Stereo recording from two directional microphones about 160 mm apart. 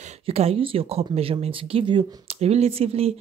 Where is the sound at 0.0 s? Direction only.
40° right (ahead or behind).